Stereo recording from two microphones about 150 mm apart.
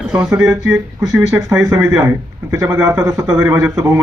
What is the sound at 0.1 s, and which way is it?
Speech, 5° right (ahead or behind).